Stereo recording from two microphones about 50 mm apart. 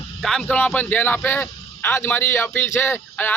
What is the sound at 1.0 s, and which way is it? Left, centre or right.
A man's voice, left.